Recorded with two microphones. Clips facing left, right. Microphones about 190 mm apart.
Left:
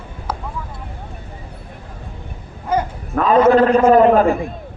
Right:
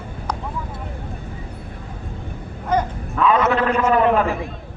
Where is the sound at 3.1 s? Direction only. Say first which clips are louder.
Left 6 dB; 40° left (ahead or behind).